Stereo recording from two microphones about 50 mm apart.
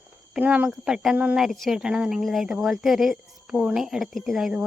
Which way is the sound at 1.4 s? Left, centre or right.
Centre.